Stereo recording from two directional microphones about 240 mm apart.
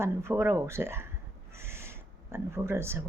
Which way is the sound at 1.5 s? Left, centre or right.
Centre.